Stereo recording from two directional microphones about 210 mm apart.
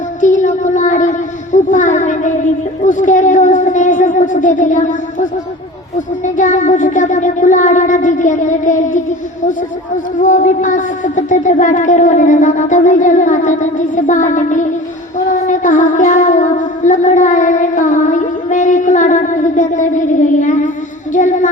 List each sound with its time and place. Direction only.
0.2 s a sound: 35° left (ahead or behind)
1.5 s music: 35° left (ahead or behind)
2.8 s speech: 35° left (ahead or behind)
6.2 s music: 35° left (ahead or behind)
10.2 s music: 35° left (ahead or behind)
21.1 s music: 35° left (ahead or behind)